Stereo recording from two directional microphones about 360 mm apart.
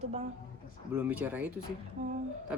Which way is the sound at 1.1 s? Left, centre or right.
Centre.